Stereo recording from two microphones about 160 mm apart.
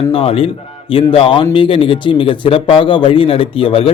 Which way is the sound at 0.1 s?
35° left (ahead or behind).